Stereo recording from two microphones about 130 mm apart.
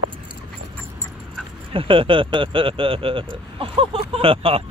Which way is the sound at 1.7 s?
45° right (ahead or behind).